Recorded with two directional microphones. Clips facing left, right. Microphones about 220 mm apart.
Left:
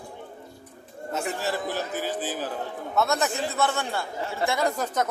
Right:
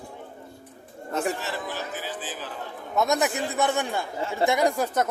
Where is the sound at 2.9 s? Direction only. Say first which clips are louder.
Right 2 dB; 15° right (ahead or behind).